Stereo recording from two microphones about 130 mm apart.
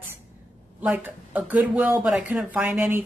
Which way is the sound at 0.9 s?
15° right (ahead or behind).